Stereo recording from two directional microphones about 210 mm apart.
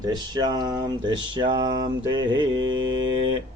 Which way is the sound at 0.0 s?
20° right (ahead or behind).